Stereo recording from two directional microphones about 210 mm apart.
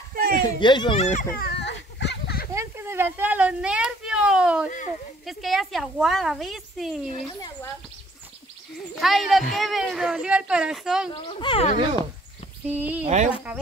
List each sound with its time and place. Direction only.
0.1 s a sound: 45° right (ahead or behind)
0.4 s speech: 20° left (ahead or behind)
1.3 s a sound: 50° left (ahead or behind)
2.5 s a woman's voice: 10° right (ahead or behind)
4.6 s speech: 35° left (ahead or behind)
5.2 s speech: centre (ahead or behind)
8.9 s speech: centre (ahead or behind)
11.1 s speech: 25° left (ahead or behind)
12.6 s speech: 10° right (ahead or behind)
13.0 s speech: 35° right (ahead or behind)